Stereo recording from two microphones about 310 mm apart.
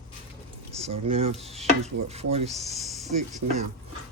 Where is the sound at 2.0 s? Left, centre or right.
Centre.